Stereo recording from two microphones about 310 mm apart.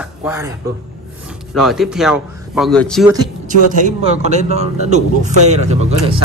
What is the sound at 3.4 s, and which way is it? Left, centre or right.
A man's voice, right.